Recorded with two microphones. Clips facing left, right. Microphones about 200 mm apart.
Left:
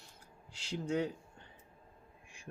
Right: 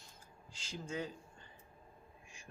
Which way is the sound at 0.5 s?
65° left (ahead or behind).